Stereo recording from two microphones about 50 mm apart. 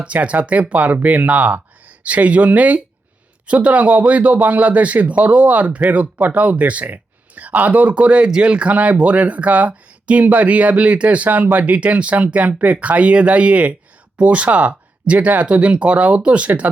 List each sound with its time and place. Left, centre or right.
0.0 s a man's voice: right